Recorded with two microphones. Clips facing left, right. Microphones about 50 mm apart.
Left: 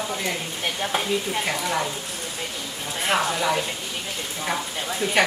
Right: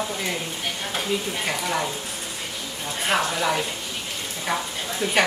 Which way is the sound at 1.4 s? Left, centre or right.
Centre.